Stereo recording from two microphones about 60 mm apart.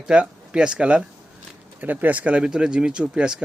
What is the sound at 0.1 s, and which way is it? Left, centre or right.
Speech, centre.